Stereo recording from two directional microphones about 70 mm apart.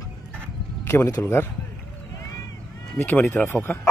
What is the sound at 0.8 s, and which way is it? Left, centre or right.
Speech, left.